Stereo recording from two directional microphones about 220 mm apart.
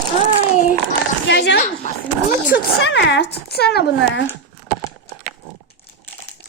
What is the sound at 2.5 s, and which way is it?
Speech, 45° left (ahead or behind).